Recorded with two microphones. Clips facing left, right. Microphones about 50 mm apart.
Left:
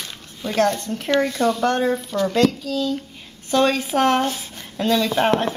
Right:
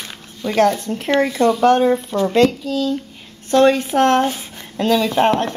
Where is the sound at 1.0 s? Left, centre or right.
Centre.